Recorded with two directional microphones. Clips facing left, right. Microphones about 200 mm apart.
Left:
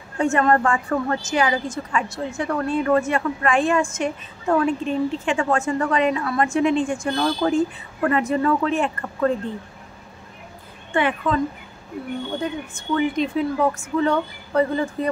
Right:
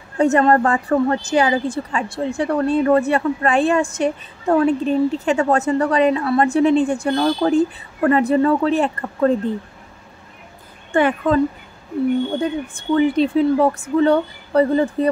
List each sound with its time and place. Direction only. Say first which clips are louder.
0.2 s a woman's voice: right 4 dB; 35° right (ahead or behind)
10.9 s a woman's voice: right 5 dB; 45° right (ahead or behind)
12.7 s a woman's voice: right 6 dB; 30° right (ahead or behind)